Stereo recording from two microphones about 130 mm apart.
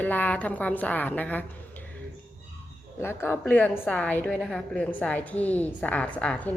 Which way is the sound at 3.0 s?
20° left (ahead or behind).